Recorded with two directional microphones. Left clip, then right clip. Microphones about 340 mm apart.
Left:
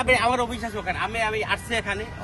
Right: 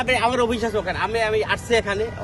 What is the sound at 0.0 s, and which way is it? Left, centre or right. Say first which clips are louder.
Speech: right 1 dB; centre.